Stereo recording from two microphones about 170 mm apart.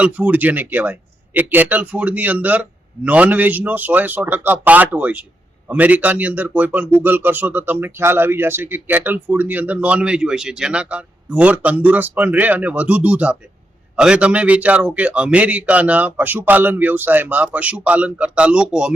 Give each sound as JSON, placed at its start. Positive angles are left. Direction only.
{"t": 0.0, "sound": "speech", "side_deg": -10}